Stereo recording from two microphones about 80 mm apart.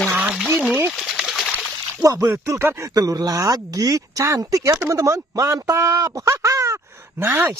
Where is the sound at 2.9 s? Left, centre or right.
Right.